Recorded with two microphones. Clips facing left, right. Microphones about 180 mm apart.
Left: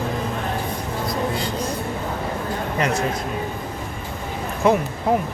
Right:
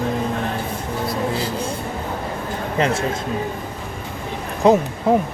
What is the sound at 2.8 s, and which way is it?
Speech, 25° right (ahead or behind).